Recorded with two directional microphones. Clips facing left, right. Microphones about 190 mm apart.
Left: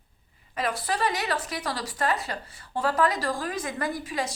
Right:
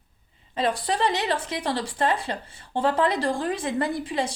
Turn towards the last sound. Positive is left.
turn(degrees=-30)  # may be behind; listen again after turning